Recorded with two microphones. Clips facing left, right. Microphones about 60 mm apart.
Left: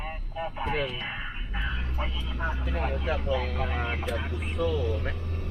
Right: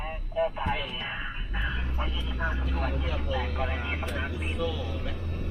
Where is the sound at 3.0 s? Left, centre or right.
Left.